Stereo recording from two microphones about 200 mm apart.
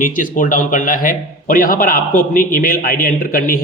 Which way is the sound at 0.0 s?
45° left (ahead or behind).